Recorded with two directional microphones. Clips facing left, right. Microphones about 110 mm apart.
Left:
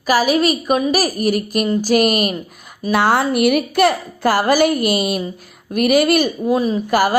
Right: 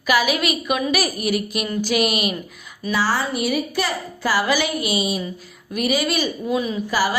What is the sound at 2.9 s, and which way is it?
A woman's voice, 60° left (ahead or behind).